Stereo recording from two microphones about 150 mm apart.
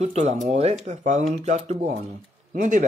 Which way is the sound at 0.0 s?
50° right (ahead or behind).